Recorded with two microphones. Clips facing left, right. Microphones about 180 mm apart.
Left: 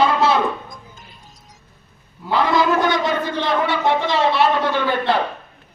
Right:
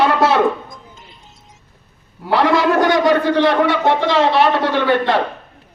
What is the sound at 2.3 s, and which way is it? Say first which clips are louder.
A man's voice: right 3 dB; 75° right (ahead or behind).